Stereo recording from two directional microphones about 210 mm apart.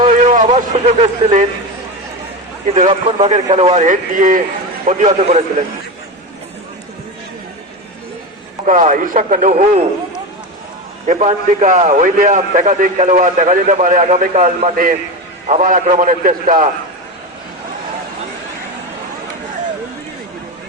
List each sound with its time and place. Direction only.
0.3 s speech: 35° right (ahead or behind)
2.7 s a man's voice: 30° right (ahead or behind)
8.6 s a man's voice: 35° right (ahead or behind)
11.0 s a man's voice: 30° right (ahead or behind)